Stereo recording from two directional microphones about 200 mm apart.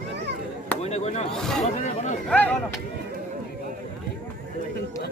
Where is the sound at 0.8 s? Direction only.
35° left (ahead or behind).